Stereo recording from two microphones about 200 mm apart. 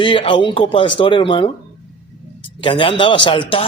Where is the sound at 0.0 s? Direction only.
25° left (ahead or behind).